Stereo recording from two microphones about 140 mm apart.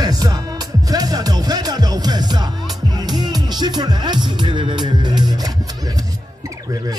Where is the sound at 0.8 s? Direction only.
25° right (ahead or behind).